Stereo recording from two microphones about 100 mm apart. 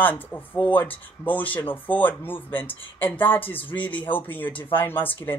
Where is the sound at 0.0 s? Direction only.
20° left (ahead or behind).